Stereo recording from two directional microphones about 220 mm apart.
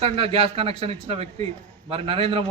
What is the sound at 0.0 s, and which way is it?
Speech, 25° right (ahead or behind).